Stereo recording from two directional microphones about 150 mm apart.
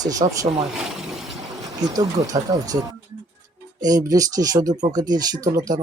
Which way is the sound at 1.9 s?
25° right (ahead or behind).